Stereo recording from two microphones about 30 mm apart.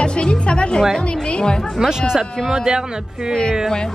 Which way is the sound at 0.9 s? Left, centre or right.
Left.